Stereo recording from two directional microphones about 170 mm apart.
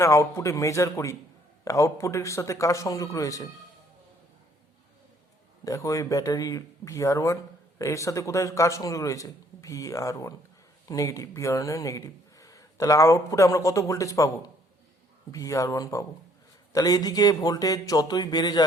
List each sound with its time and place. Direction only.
0.0 s speech: 15° left (ahead or behind)
5.6 s speech: 20° left (ahead or behind)